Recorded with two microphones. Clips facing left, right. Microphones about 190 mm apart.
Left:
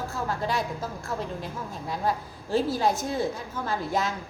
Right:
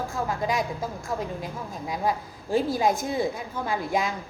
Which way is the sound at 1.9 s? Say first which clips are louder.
Right 1 dB; 15° right (ahead or behind).